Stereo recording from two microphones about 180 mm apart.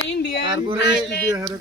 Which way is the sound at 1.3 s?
15° right (ahead or behind).